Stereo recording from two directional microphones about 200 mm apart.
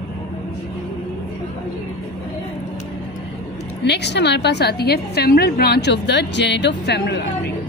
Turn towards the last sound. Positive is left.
turn(degrees=55)  # may be behind; listen again after turning